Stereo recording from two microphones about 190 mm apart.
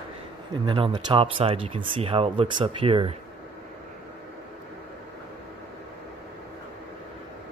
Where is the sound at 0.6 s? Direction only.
25° right (ahead or behind).